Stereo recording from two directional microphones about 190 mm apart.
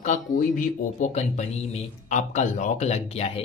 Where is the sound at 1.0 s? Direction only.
40° left (ahead or behind).